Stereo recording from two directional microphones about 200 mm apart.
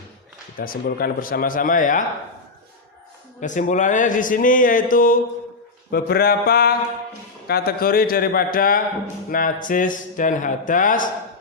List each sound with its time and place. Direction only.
0.6 s a man's voice: 45° left (ahead or behind)
3.4 s a man's voice: 40° left (ahead or behind)